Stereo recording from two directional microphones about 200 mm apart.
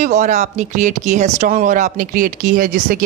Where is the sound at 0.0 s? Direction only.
40° right (ahead or behind).